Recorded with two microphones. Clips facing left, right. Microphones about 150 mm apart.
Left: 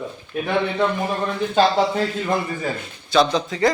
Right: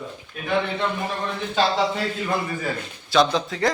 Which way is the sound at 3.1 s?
Centre (ahead or behind).